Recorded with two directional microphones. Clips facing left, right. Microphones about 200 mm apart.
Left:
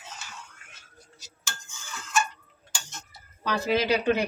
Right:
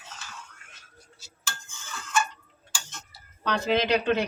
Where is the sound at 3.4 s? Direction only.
5° left (ahead or behind).